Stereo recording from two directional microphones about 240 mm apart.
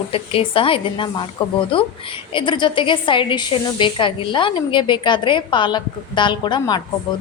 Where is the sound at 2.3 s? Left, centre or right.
Centre.